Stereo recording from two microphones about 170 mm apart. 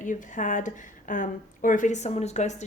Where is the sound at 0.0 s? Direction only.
50° left (ahead or behind).